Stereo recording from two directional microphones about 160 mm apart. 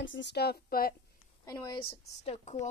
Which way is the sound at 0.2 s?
85° left.